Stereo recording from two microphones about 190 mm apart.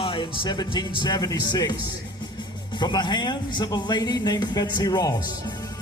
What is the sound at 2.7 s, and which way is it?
Speech, 25° left (ahead or behind).